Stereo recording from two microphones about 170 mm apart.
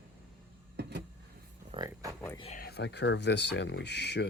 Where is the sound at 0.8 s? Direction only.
80° right.